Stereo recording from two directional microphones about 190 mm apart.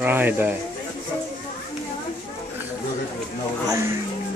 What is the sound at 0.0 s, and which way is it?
Speech, 10° right (ahead or behind).